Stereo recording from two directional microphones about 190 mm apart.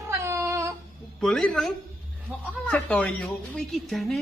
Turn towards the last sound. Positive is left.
turn(degrees=0)  # may be behind; listen again after turning